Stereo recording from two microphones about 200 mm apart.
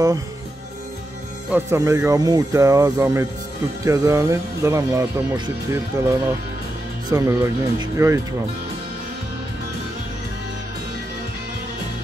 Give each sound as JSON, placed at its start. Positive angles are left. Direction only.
{"t": 1.5, "sound": "speech", "side_deg": -15}